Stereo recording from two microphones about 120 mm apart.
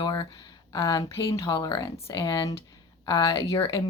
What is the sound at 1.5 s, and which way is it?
Speech, 40° left (ahead or behind).